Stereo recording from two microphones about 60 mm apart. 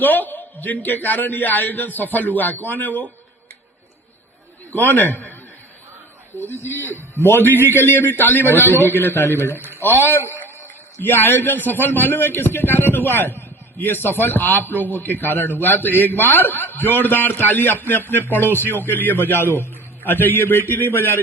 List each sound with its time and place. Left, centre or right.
0.0 s a man's voice: left
4.7 s a man's voice: left
6.7 s a man's voice: left
9.6 s speech: right
10.0 s a man's voice: left